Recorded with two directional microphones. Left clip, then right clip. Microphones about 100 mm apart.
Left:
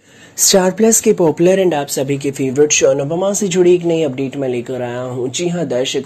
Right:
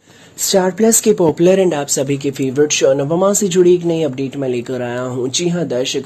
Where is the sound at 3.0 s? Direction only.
90° right.